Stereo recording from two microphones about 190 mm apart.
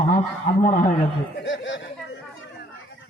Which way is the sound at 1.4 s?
75° left (ahead or behind).